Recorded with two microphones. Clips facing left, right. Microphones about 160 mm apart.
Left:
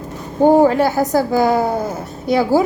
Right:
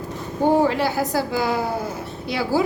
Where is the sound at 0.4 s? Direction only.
45° left (ahead or behind).